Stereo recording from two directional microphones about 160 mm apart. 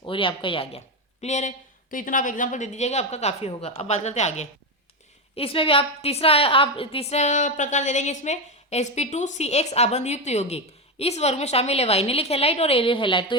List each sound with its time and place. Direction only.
0.0 s a woman's voice: 30° left (ahead or behind)
1.2 s a woman's voice: 45° left (ahead or behind)
5.4 s a woman's voice: 35° left (ahead or behind)